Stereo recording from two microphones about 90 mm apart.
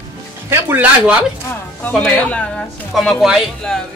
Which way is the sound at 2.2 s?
15° left (ahead or behind).